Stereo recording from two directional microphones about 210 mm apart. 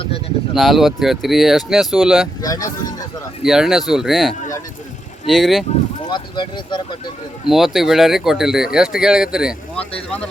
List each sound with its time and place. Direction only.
0.5 s speech: centre (ahead or behind)
2.4 s speech: 15° left (ahead or behind)
3.4 s speech: centre (ahead or behind)
6.1 s speech: 20° left (ahead or behind)
7.4 s speech: centre (ahead or behind)